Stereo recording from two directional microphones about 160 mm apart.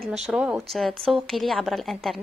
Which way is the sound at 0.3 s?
5° right (ahead or behind).